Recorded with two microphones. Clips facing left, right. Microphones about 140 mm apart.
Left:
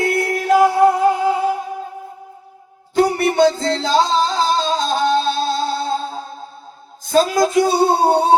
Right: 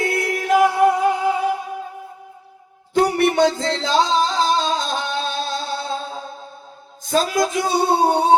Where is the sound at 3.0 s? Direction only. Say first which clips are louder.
Left 2 dB; 35° left (ahead or behind).